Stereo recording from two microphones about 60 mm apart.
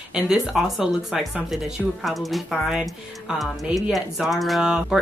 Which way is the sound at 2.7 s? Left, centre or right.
Centre.